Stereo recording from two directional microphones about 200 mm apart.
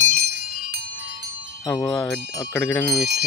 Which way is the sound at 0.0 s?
45° right (ahead or behind).